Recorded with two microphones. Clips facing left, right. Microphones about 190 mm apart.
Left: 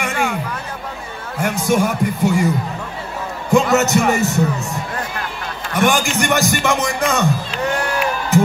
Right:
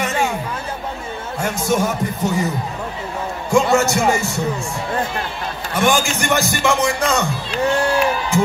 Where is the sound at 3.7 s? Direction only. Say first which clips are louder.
Left 1 dB; 20° left (ahead or behind).